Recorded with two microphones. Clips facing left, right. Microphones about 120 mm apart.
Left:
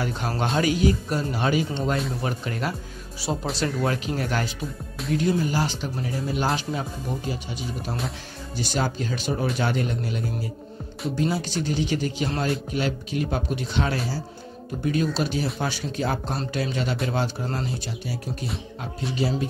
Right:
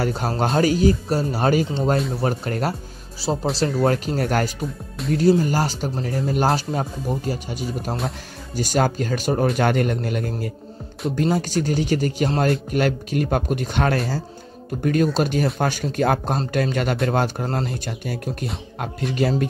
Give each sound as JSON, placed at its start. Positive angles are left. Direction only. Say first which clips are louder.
{"t": 0.0, "sound": "speech", "louder": "right 4 dB", "side_deg": -40}
{"t": 3.2, "sound": "speech", "louder": "right 5 dB", "side_deg": -30}
{"t": 5.1, "sound": "speech", "louder": "right 5 dB", "side_deg": -40}